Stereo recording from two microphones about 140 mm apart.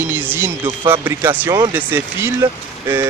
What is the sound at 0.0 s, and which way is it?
Speech, 15° right (ahead or behind).